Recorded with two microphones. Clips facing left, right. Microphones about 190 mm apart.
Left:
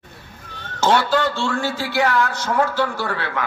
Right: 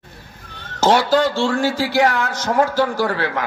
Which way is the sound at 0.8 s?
40° right (ahead or behind).